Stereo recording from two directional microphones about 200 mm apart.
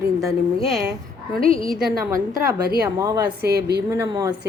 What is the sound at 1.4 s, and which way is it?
Speech, 45° right (ahead or behind).